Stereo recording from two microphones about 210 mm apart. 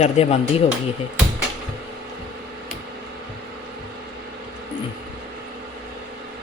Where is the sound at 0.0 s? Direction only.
30° left (ahead or behind).